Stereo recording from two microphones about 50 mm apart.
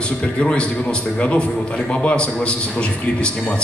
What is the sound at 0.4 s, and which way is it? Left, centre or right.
Speech, left.